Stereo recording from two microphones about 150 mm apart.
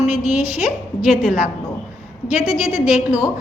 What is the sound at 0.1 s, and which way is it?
A woman's voice, 5° right (ahead or behind).